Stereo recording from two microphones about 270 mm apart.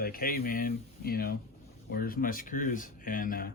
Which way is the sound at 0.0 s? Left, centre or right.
Left.